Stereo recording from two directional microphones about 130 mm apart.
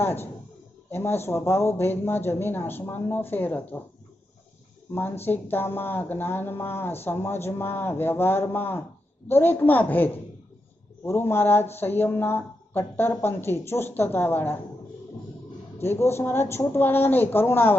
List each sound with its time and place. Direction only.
0.0 s speech: 15° left (ahead or behind)
4.9 s speech: 15° left (ahead or behind)
15.8 s speech: 20° left (ahead or behind)